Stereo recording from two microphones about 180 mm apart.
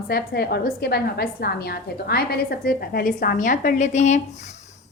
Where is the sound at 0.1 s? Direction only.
60° left (ahead or behind); by 4.2 s 40° left (ahead or behind).